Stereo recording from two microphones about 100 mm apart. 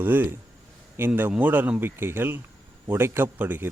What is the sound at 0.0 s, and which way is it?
Speech, 20° right (ahead or behind).